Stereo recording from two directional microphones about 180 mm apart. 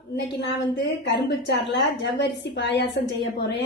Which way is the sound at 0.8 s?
70° left (ahead or behind).